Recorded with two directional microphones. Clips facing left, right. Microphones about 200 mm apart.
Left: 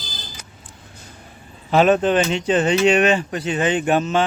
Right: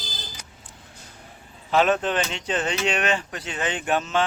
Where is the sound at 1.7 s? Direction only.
10° left (ahead or behind).